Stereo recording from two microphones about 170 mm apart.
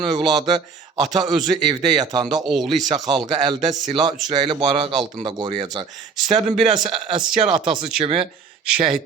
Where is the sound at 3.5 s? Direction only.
25° right (ahead or behind).